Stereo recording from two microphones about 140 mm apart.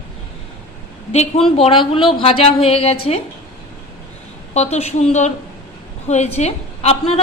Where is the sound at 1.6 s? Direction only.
40° left (ahead or behind).